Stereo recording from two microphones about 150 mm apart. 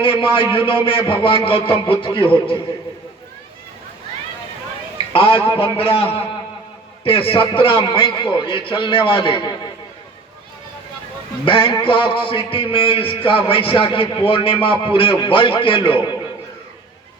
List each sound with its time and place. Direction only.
0.0 s a man's voice: 35° left (ahead or behind)
5.1 s a man's voice: 40° left (ahead or behind)
11.4 s a man's voice: 35° left (ahead or behind)